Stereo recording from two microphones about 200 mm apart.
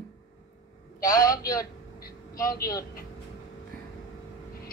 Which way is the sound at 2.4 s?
45° left (ahead or behind).